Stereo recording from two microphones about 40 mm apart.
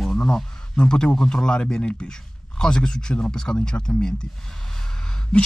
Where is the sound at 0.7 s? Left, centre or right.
Left.